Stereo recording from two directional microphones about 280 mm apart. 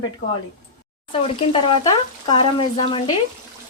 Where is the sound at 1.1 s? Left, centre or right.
Centre.